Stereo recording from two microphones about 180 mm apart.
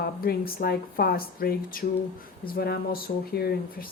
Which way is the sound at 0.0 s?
55° left (ahead or behind).